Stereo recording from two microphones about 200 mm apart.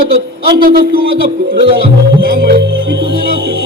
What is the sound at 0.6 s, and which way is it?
Music, 50° right (ahead or behind).